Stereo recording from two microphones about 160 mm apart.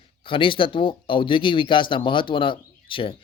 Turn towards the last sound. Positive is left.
turn(degrees=30)  # may be behind; listen again after turning